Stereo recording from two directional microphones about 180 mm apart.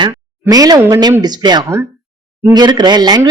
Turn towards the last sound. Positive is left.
turn(degrees=-25)  # may be behind; listen again after turning